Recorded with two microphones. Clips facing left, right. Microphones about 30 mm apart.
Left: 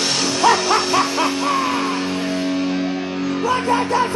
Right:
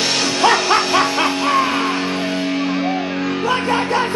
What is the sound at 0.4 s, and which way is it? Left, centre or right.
Music, right.